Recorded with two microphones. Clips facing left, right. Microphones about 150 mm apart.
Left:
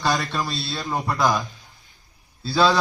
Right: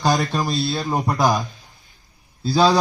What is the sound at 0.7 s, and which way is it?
Speech, 40° right (ahead or behind).